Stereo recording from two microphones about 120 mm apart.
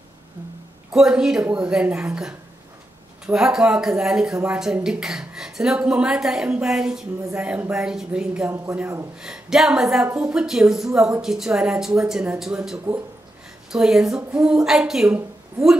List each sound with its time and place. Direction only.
0.9 s a woman's voice: 5° right (ahead or behind)
8.5 s speech: 25° right (ahead or behind)
9.2 s speech: 5° right (ahead or behind)